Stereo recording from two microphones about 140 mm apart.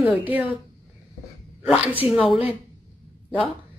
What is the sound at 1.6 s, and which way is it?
Speech, 10° right (ahead or behind).